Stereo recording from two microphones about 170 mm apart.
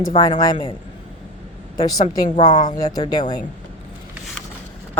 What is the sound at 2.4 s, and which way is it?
Speech, 25° left (ahead or behind).